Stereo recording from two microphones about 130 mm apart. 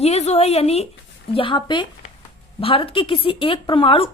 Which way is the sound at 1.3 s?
40° left (ahead or behind).